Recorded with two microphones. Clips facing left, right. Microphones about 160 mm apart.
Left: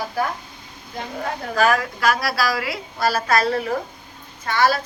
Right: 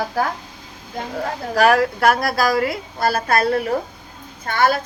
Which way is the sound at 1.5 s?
65° right (ahead or behind).